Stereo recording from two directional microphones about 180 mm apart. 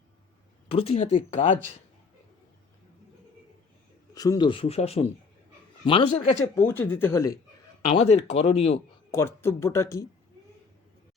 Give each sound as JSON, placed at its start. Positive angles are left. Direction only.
{"t": 0.7, "sound": "speech", "side_deg": 35}
{"t": 4.1, "sound": "speech", "side_deg": 20}
{"t": 6.1, "sound": "speech", "side_deg": 40}
{"t": 6.4, "sound": "speech", "side_deg": 10}
{"t": 7.9, "sound": "speech", "side_deg": 35}
{"t": 9.1, "sound": "speech", "side_deg": 15}